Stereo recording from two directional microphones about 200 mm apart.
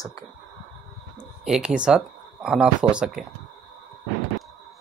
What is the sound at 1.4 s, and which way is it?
Speech, 5° right (ahead or behind).